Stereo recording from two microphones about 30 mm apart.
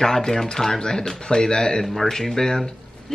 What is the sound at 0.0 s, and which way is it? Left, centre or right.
Speech, centre.